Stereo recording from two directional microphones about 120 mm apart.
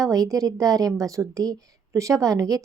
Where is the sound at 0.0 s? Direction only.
30° right (ahead or behind).